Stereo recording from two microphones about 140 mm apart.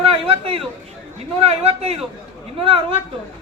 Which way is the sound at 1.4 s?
45° right (ahead or behind).